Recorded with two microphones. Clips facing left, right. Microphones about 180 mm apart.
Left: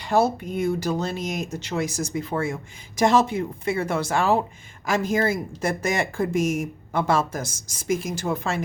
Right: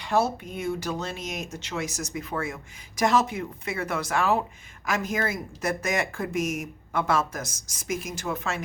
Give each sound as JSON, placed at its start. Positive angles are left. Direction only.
{"t": 0.0, "sound": "speech", "side_deg": 35}